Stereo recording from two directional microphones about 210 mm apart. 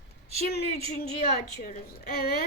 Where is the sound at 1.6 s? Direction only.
45° left (ahead or behind).